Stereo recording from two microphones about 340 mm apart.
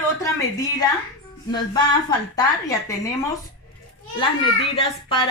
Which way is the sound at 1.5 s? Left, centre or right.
Centre.